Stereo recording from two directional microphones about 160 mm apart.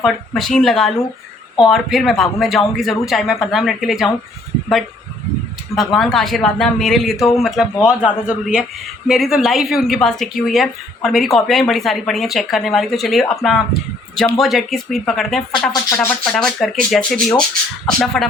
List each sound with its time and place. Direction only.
0.0 s speech: centre (ahead or behind)
5.7 s speech: centre (ahead or behind)